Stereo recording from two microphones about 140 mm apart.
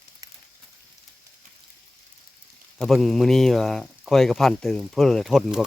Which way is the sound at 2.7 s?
Centre (ahead or behind).